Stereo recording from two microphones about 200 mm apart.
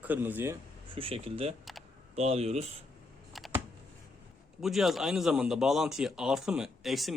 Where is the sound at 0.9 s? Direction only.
30° right (ahead or behind).